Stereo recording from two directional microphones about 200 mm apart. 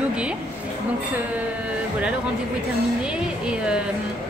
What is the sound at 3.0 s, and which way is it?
Speech, 5° right (ahead or behind).